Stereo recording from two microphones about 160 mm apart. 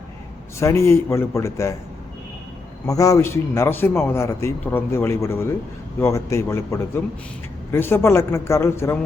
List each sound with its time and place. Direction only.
0.6 s a man's voice: 15° left (ahead or behind)
2.8 s a man's voice: 20° left (ahead or behind)